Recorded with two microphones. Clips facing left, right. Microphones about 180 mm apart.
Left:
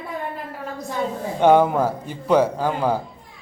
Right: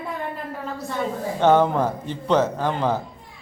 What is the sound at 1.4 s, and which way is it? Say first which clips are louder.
Speech: left 2 dB; 10° left (ahead or behind).